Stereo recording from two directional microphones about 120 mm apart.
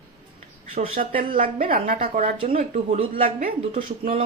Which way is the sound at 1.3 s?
85° right.